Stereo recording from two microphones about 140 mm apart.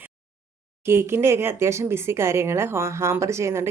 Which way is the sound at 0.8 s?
20° right (ahead or behind).